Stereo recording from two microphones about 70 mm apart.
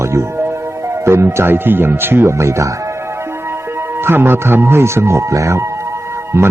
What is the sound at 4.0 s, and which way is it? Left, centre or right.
Speech, right.